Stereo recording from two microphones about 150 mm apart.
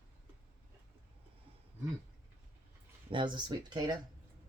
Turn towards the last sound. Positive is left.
turn(degrees=-30)  # may be behind; listen again after turning